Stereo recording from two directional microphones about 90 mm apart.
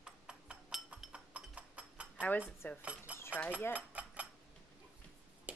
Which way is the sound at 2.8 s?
15° right (ahead or behind).